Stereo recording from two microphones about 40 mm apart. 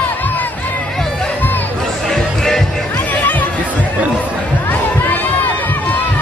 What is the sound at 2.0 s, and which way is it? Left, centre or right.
Music, centre.